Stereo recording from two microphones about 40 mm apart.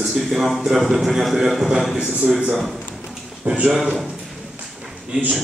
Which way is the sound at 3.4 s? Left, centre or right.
Right.